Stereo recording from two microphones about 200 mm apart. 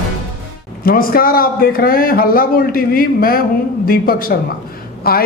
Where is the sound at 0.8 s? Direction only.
45° left (ahead or behind).